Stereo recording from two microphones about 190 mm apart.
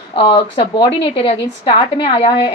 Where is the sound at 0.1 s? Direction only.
30° left (ahead or behind).